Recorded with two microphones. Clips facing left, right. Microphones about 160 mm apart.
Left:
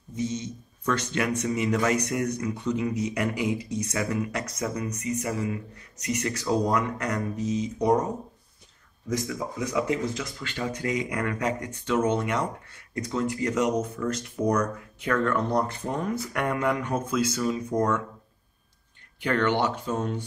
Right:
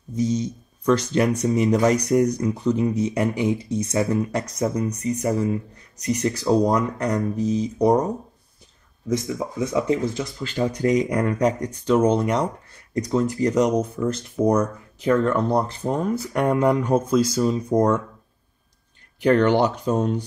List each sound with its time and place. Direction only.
0.1 s speech: 35° right (ahead or behind)
9.3 s speech: 25° right (ahead or behind)
19.2 s speech: 40° right (ahead or behind)